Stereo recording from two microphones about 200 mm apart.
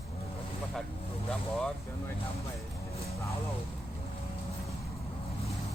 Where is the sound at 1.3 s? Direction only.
Centre (ahead or behind).